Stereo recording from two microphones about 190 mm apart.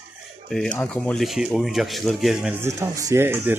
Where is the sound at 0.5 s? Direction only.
5° left (ahead or behind).